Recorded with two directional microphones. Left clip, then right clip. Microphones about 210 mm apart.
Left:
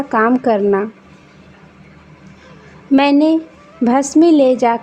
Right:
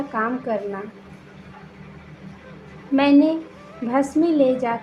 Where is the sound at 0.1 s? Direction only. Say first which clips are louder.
Left 12 dB; 50° left (ahead or behind).